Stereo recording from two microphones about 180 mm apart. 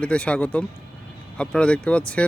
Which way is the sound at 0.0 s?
5° left (ahead or behind).